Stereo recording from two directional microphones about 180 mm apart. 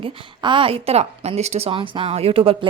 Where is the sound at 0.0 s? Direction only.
30° right (ahead or behind).